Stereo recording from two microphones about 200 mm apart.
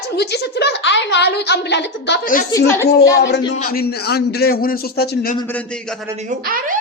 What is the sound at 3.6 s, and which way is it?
A man's voice, 45° left (ahead or behind).